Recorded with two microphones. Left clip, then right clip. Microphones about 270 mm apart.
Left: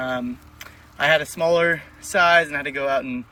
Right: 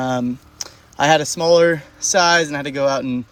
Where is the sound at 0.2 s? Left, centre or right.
Centre.